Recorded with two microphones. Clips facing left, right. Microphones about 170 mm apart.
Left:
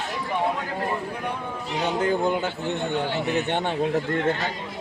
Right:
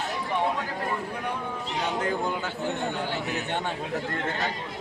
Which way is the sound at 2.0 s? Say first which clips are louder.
Left 5 dB; 25° left (ahead or behind).